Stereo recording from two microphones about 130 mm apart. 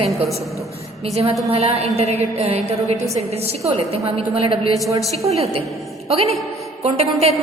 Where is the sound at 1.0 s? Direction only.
55° right (ahead or behind).